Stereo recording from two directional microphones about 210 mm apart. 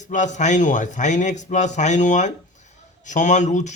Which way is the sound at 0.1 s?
35° left (ahead or behind).